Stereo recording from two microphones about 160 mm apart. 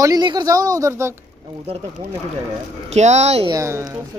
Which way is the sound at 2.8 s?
45° right (ahead or behind).